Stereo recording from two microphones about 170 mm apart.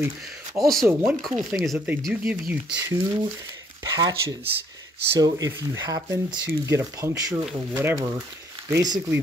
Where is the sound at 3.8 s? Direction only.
20° right (ahead or behind).